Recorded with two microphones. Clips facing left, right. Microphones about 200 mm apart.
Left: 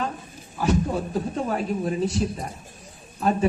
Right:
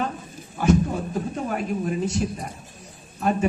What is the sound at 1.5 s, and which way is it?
Speech, 35° left (ahead or behind).